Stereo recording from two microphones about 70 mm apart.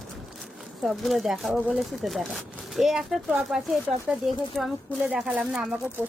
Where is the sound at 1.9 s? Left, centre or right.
Centre.